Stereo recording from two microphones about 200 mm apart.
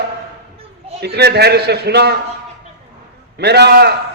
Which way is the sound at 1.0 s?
55° right (ahead or behind).